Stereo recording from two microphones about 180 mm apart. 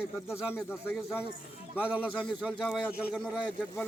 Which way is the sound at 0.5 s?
10° left (ahead or behind).